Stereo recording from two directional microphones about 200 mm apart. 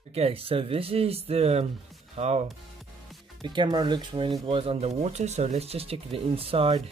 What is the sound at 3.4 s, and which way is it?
Speech, 25° right (ahead or behind).